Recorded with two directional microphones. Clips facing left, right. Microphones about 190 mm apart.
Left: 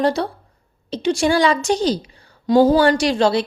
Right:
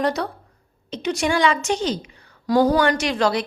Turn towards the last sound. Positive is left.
turn(degrees=30)  # may be behind; listen again after turning